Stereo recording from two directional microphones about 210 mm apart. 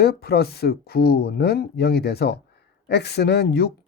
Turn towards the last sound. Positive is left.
turn(degrees=50)  # may be behind; listen again after turning